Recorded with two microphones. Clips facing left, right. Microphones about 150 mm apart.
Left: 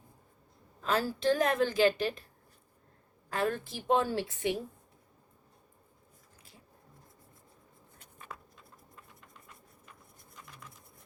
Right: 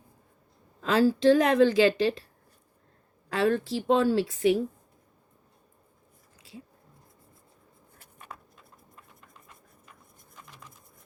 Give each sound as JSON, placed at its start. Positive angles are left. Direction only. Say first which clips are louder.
{"t": 0.8, "sound": "a woman's voice", "louder": "right 8 dB", "side_deg": -90}
{"t": 3.2, "sound": "a woman's voice", "louder": "right 7 dB", "side_deg": -90}